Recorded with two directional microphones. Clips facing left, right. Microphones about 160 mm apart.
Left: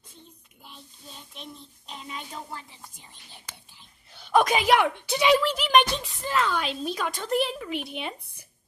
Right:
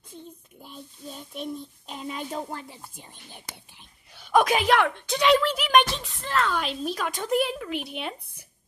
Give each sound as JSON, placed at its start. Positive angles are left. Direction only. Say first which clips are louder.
{"t": 0.7, "sound": "child singing", "louder": "right 7 dB", "side_deg": -45}
{"t": 4.1, "sound": "a sound", "louder": "right 1 dB", "side_deg": -5}
{"t": 4.7, "sound": "a woman's voice", "louder": "even", "side_deg": 10}